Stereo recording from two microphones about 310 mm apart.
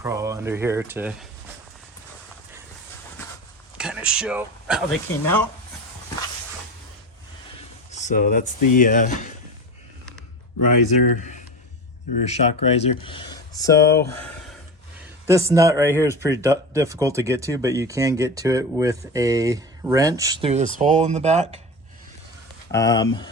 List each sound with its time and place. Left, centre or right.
0.0 s speech: centre
3.8 s speech: centre
7.9 s speech: left
11.2 s speech: left
15.3 s speech: centre
22.7 s speech: centre